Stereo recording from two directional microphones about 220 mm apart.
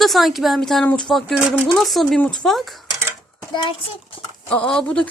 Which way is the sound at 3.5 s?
20° left (ahead or behind).